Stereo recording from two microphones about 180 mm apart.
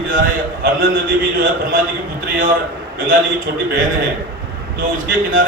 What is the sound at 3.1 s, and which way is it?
Speech, 50° right (ahead or behind).